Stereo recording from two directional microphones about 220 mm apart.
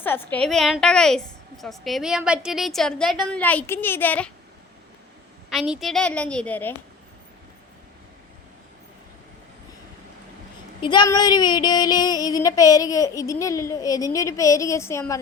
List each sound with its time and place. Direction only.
0.0 s a woman's voice: 10° left (ahead or behind)
5.5 s a woman's voice: centre (ahead or behind)
10.8 s a sound: 20° left (ahead or behind)